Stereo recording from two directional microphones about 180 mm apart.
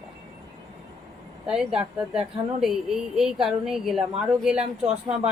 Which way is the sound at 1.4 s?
5° right (ahead or behind).